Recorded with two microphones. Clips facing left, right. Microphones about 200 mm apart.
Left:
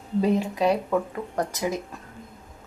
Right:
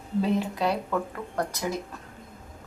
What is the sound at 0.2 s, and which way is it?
Speech, 15° left (ahead or behind).